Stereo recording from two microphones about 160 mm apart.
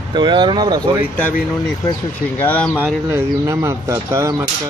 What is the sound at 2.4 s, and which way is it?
Speech, 10° left (ahead or behind).